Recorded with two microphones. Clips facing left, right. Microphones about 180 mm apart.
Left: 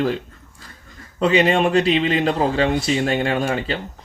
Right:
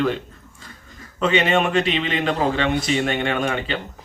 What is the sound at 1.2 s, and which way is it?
Speech, 35° left (ahead or behind).